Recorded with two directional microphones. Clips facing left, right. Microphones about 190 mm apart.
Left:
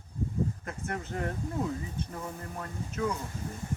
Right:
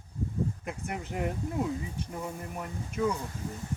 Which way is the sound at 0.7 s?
15° right (ahead or behind).